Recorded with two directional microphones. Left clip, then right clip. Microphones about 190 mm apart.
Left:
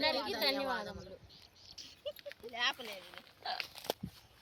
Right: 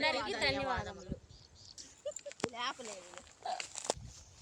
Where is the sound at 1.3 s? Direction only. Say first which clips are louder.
Left 1 dB; 40° right (ahead or behind).